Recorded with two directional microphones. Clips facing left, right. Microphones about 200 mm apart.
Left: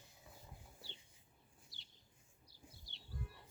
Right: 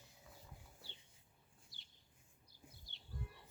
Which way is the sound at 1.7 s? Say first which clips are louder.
Left 2 dB; 50° right (ahead or behind).